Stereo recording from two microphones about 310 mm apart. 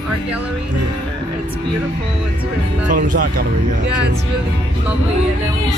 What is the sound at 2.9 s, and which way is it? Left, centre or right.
Speech, right.